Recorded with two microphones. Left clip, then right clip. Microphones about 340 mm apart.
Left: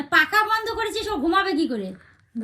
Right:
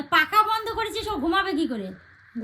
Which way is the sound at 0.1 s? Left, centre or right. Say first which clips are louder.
Left 1 dB; right.